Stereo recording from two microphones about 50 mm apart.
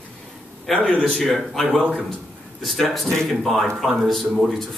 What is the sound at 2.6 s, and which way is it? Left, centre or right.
Speech, centre.